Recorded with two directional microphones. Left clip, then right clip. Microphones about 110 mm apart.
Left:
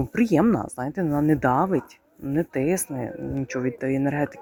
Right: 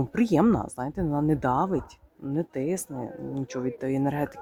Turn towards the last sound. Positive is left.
turn(degrees=0)  # may be behind; listen again after turning